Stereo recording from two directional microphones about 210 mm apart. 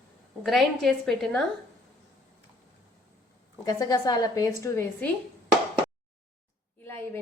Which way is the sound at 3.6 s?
15° left (ahead or behind).